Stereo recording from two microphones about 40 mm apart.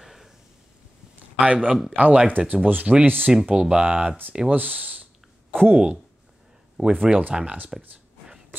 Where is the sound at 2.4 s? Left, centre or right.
Right.